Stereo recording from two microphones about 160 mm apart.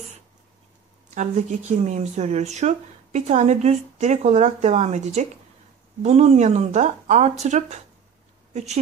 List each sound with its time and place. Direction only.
1.1 s speech: 45° right (ahead or behind)